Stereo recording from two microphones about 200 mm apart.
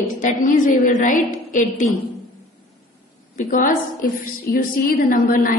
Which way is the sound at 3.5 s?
40° left (ahead or behind).